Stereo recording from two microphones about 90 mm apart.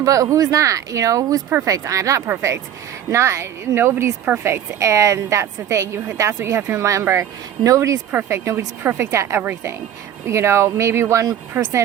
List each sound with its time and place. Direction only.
0.0 s a woman's voice: 40° right (ahead or behind)
8.1 s a woman's voice: 25° right (ahead or behind)